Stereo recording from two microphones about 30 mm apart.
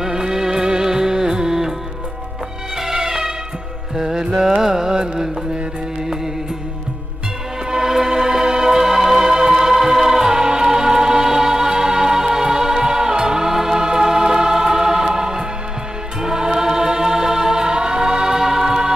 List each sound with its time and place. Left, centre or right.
0.0 s music: centre
2.8 s music: centre
7.7 s music: centre
16.2 s choir: right